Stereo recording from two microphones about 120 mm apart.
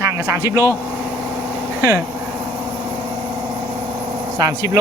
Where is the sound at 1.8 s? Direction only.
25° right (ahead or behind).